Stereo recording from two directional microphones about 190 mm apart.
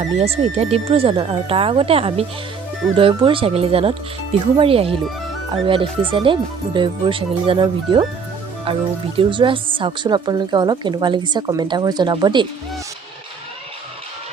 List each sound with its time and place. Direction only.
0.2 s speech: 30° right (ahead or behind)
9.1 s speech: 25° right (ahead or behind)